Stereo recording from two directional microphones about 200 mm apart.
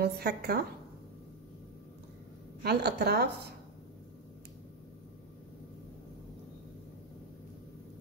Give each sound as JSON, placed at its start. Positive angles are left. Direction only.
{"t": 0.0, "sound": "a woman's voice", "side_deg": -50}
{"t": 2.6, "sound": "speech", "side_deg": -55}